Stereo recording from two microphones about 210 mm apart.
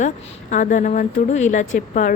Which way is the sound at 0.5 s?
35° left (ahead or behind).